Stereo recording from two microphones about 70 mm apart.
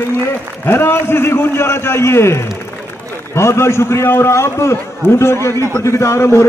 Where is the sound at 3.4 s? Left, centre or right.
Left.